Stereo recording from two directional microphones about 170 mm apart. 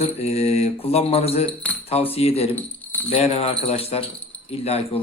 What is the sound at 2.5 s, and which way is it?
Keys jangling, 10° left (ahead or behind).